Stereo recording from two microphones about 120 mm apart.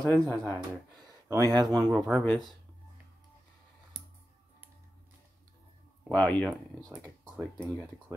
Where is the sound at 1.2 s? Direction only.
30° right (ahead or behind).